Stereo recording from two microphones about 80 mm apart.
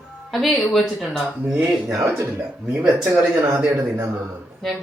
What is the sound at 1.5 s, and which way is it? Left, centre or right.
Speech, centre.